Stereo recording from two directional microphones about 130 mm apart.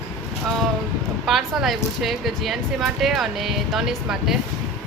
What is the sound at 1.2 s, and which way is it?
Speech, centre (ahead or behind).